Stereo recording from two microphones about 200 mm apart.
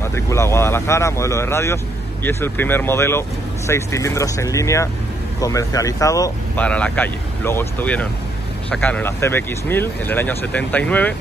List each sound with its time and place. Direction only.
0.0 s speech: 15° left (ahead or behind)
6.6 s speech: 5° left (ahead or behind)